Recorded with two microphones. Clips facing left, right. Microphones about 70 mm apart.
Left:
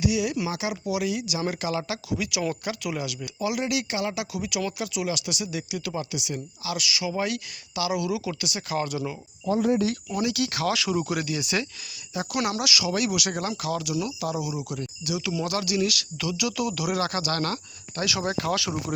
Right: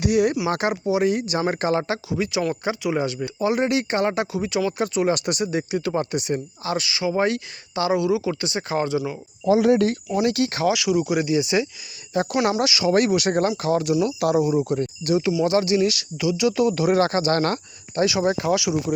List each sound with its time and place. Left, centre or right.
0.0 s speech: right
0.9 s speech: right
9.5 s speech: right
10.2 s speech: right
10.7 s speech: centre
11.1 s speech: right
14.2 s speech: right
14.4 s speech: right
17.9 s speech: right